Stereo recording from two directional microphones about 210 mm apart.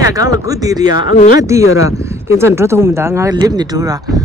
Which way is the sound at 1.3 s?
15° right (ahead or behind).